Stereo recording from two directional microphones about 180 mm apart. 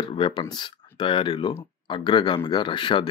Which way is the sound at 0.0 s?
25° left (ahead or behind).